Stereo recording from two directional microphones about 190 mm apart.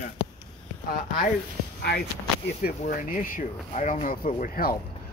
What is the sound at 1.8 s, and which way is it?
Speech, 55° left (ahead or behind).